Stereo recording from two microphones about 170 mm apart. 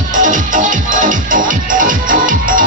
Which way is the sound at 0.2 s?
50° right (ahead or behind).